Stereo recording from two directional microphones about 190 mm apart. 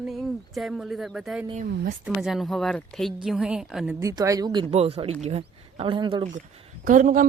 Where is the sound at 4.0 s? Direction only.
15° right (ahead or behind).